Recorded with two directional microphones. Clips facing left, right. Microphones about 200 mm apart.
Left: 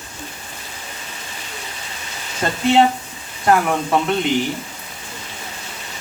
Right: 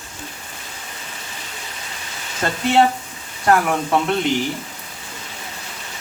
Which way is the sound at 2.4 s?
10° left (ahead or behind).